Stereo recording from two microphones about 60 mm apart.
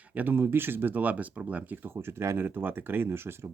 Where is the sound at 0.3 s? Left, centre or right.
Right.